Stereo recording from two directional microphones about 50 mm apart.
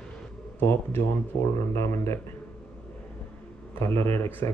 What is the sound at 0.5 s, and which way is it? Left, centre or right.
Speech, left.